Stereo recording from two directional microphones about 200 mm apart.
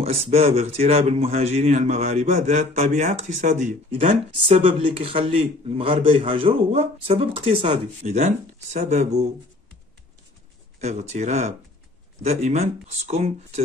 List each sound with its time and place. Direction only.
0.0 s speech: 30° right (ahead or behind)
10.8 s speech: 35° right (ahead or behind)